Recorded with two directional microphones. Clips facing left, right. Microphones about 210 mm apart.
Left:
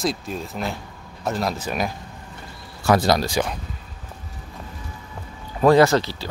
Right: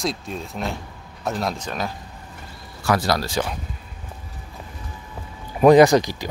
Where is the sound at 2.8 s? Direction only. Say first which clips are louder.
Left 3 dB; 25° left (ahead or behind).